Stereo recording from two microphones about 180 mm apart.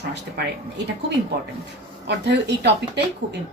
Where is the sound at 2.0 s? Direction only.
70° right (ahead or behind).